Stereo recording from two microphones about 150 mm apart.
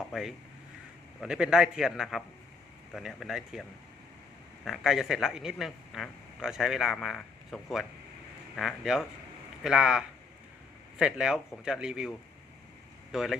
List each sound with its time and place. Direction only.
0.1 s speech: centre (ahead or behind)